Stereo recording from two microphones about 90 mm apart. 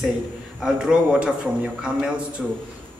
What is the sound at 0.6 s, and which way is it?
Speech, 5° right (ahead or behind).